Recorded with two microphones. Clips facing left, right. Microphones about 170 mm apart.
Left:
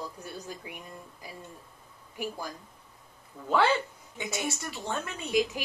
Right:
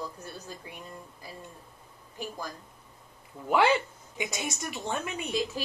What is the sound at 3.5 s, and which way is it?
A woman's voice, 15° right (ahead or behind).